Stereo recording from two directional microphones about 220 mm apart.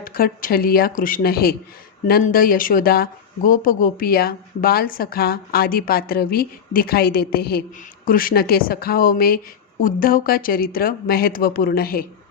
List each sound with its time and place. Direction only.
0.0 s speech: 40° left (ahead or behind)